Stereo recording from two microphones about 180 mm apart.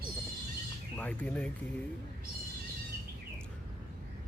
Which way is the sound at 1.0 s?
10° left (ahead or behind).